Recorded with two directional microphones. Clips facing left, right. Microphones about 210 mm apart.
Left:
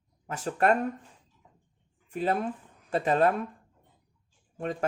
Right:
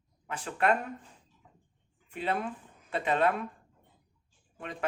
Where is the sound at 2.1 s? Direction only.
40° left (ahead or behind).